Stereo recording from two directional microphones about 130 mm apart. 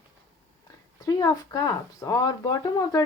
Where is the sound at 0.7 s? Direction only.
30° left (ahead or behind).